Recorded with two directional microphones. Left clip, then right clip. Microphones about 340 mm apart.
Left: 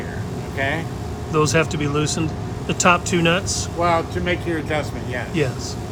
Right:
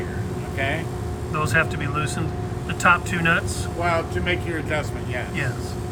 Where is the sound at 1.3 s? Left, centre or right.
Centre.